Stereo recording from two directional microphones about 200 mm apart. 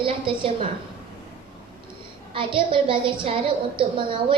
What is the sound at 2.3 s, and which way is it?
A woman's voice, 25° right (ahead or behind).